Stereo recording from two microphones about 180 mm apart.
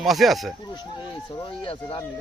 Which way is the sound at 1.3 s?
30° left (ahead or behind).